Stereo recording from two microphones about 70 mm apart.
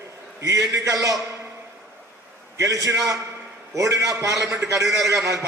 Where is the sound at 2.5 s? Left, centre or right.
Right.